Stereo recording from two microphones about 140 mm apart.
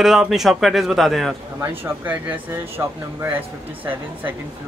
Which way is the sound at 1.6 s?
15° right (ahead or behind).